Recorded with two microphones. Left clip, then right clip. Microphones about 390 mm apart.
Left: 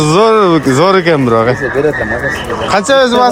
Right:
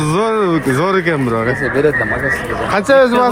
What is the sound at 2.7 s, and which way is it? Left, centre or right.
Speech, centre.